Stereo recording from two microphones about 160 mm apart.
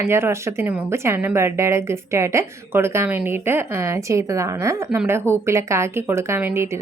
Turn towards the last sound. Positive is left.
turn(degrees=-15)  # may be behind; listen again after turning